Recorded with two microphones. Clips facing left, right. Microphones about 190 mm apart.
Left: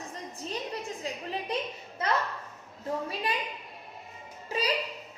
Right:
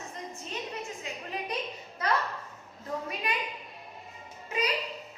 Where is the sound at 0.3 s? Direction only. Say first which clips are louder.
Left 4 dB; 35° left (ahead or behind).